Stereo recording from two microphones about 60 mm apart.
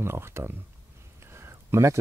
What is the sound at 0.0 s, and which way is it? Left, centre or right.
Speech, right.